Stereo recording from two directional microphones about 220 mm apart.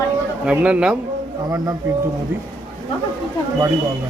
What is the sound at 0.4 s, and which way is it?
Speech, 5° right (ahead or behind).